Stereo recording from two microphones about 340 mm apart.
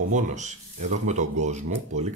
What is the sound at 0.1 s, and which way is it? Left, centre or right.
Speech, right.